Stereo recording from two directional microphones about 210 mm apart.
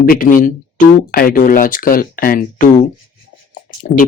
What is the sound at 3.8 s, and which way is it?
Speech, 40° left (ahead or behind).